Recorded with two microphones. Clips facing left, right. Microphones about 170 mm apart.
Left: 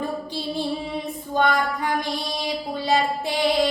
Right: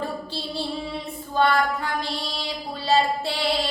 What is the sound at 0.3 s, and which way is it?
Female singing, 15° left (ahead or behind).